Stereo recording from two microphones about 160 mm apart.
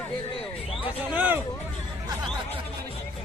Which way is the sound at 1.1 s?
10° right (ahead or behind).